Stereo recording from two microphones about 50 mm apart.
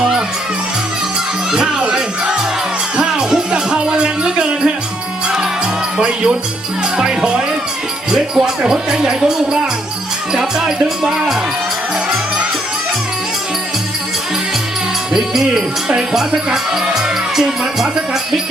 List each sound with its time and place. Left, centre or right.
1.8 s music: centre
6.0 s speech: centre
8.4 s music: right
8.9 s speech: centre
15.1 s music: centre
17.3 s speech: centre